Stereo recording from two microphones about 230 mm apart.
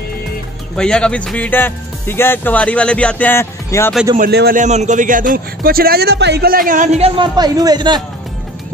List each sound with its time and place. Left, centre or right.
0.7 s speech: centre
4.2 s speech: right; by 8.0 s centre